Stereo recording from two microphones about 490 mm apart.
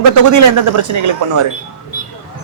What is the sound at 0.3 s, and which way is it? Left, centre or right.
Speech, right.